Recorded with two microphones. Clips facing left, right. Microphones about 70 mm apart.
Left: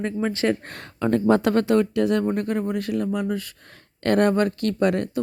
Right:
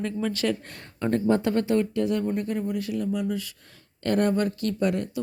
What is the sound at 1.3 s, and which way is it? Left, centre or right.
Speech, left.